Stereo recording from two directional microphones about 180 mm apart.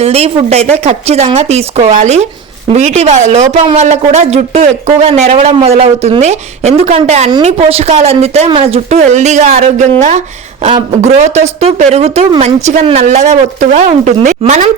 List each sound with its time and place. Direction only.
0.0 s speech: 35° right (ahead or behind)